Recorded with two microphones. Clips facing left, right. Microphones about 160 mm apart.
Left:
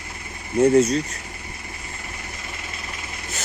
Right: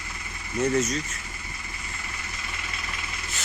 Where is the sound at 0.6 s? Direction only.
30° left (ahead or behind).